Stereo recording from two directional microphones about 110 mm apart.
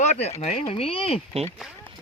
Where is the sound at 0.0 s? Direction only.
80° left; by 1.2 s 60° left (ahead or behind).